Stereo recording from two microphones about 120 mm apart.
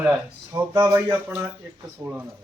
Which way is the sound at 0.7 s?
25° right (ahead or behind).